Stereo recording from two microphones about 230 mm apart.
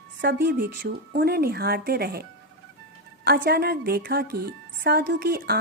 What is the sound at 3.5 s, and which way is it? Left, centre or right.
Speech, right.